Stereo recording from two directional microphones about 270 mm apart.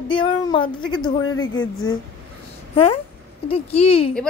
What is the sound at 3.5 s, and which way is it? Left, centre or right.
Speech, left.